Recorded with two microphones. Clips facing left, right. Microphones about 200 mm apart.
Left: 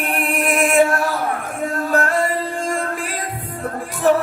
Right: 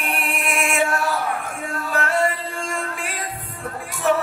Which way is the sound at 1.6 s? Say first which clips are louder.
Left 8 dB; 45° left (ahead or behind).